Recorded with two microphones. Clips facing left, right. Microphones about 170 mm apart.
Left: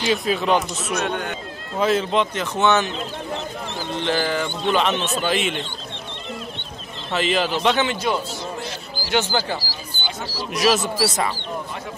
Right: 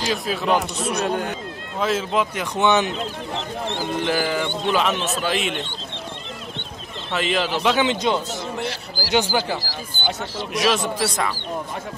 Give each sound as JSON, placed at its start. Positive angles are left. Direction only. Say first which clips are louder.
{"t": 0.1, "sound": "a man's voice", "louder": "left 2 dB", "side_deg": 0}
{"t": 0.7, "sound": "speech", "louder": "right 2 dB", "side_deg": -30}
{"t": 1.8, "sound": "speech", "louder": "left 2 dB", "side_deg": 0}
{"t": 3.9, "sound": "a man's voice", "louder": "left 1 dB", "side_deg": -10}
{"t": 7.1, "sound": "a man's voice", "louder": "left 1 dB", "side_deg": 0}
{"t": 7.8, "sound": "speech", "louder": "right 2 dB", "side_deg": -20}
{"t": 8.5, "sound": "a sound", "louder": "right 3 dB", "side_deg": -65}
{"t": 9.1, "sound": "speech", "louder": "right 1 dB", "side_deg": -10}
{"t": 10.5, "sound": "a man's voice", "louder": "left 2 dB", "side_deg": 0}